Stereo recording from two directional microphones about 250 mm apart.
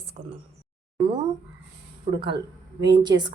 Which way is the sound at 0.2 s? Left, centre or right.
Right.